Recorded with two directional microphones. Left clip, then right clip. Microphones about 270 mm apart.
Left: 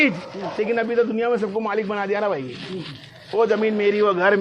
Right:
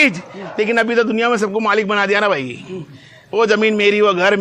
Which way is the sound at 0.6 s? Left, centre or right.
Right.